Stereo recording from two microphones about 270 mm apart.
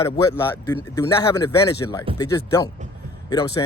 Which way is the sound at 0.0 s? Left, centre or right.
Centre.